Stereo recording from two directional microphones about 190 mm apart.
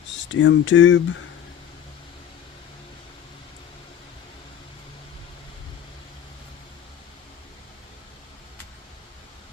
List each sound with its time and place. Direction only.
0.3 s speech: 75° left (ahead or behind)